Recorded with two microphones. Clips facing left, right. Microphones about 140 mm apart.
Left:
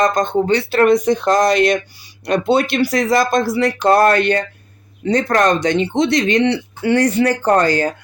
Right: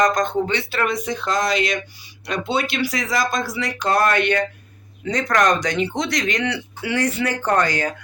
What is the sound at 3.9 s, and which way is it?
Speech, 35° left (ahead or behind).